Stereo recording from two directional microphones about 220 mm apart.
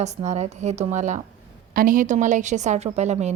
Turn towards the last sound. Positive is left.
turn(degrees=-30)  # may be behind; listen again after turning